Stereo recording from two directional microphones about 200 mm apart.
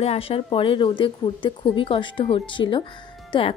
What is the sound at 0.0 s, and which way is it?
A woman's voice, 30° left (ahead or behind).